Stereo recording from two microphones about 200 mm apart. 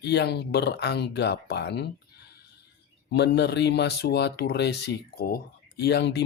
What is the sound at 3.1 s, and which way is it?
Speech, 55° left (ahead or behind).